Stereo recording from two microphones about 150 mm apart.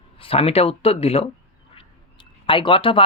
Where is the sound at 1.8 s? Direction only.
35° left (ahead or behind).